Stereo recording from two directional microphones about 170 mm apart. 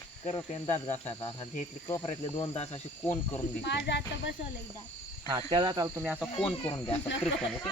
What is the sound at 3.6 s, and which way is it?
Speech, 90° left.